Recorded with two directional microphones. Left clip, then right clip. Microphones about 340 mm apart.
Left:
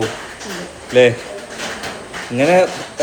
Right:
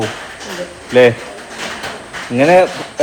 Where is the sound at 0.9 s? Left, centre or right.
Centre.